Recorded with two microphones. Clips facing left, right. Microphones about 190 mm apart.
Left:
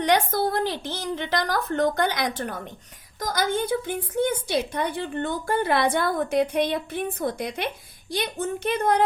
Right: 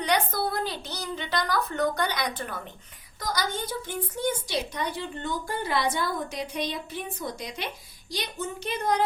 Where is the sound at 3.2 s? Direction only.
50° left (ahead or behind).